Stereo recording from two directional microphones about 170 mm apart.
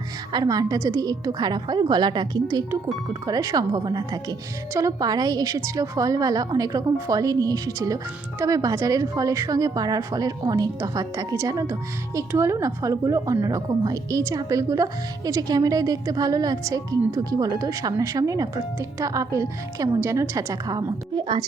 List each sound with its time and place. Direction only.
0.3 s a woman's voice: 20° right (ahead or behind)